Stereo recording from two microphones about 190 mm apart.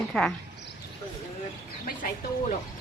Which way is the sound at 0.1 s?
Centre (ahead or behind).